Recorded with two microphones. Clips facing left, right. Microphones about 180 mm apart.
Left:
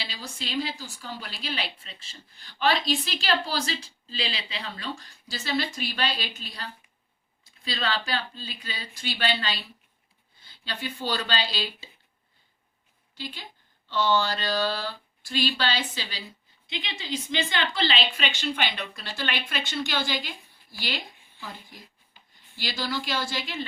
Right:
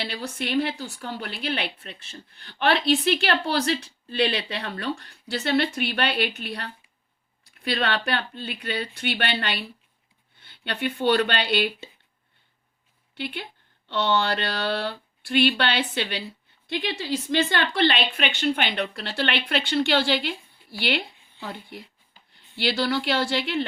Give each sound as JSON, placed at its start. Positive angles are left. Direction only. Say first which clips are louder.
{"t": 0.0, "sound": "a woman's voice", "louder": "right 7 dB", "side_deg": -60}
{"t": 13.1, "sound": "a woman's voice", "louder": "right 6 dB", "side_deg": -65}